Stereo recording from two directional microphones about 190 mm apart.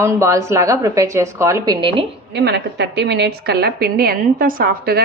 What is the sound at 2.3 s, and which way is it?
A woman's voice, 65° right (ahead or behind).